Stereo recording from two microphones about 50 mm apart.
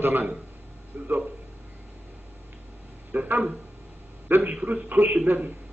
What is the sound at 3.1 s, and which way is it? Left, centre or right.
A man's voice, right.